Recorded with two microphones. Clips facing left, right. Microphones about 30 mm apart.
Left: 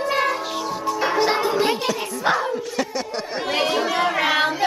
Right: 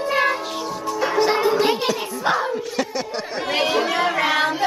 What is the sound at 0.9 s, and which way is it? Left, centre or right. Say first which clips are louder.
Music: right 1 dB; centre.